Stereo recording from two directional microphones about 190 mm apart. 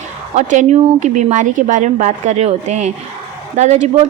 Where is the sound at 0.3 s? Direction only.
40° right (ahead or behind).